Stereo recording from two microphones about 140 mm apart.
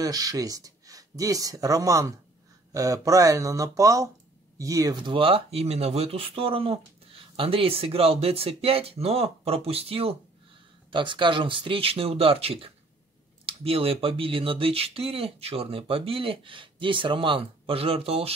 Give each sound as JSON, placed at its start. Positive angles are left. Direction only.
{"t": 0.0, "sound": "speech", "side_deg": -25}